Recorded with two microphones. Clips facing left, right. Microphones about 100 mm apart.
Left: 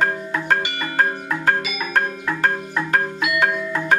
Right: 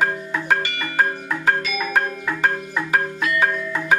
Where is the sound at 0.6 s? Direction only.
15° left (ahead or behind).